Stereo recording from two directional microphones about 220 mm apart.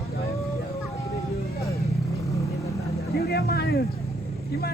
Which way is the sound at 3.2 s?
45° left (ahead or behind).